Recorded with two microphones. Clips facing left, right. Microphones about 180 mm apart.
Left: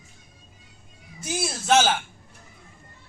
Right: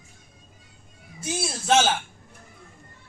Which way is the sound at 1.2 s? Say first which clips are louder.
Even; 25° right (ahead or behind).